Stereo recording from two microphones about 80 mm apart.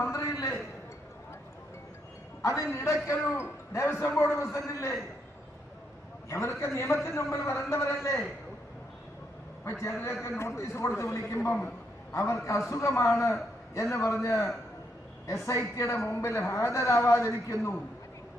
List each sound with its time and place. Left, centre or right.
0.0 s a sound: left
2.4 s a man's voice: left
6.2 s a man's voice: left
9.7 s a man's voice: left